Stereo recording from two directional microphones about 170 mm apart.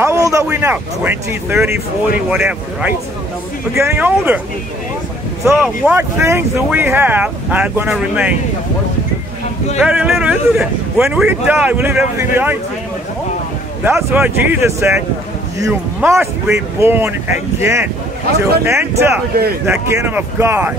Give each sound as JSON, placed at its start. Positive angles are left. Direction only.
{"t": 0.0, "sound": "speech", "side_deg": -15}
{"t": 5.4, "sound": "speech", "side_deg": 0}
{"t": 5.9, "sound": "speech", "side_deg": -15}
{"t": 9.8, "sound": "speech", "side_deg": -5}
{"t": 14.1, "sound": "speech", "side_deg": -10}